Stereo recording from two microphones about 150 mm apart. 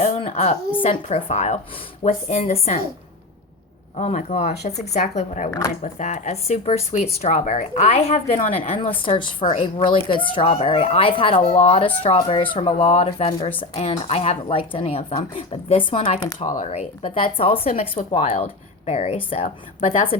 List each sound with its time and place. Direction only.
0.0 s speech: 45° left (ahead or behind)
3.9 s speech: 45° left (ahead or behind)
5.5 s speech: 20° left (ahead or behind)
5.8 s speech: 55° left (ahead or behind)
16.4 s speech: 55° left (ahead or behind)